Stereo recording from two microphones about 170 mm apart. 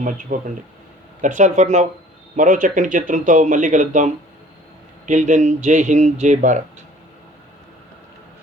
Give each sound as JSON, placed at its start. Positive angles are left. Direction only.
{"t": 0.0, "sound": "speech", "side_deg": -55}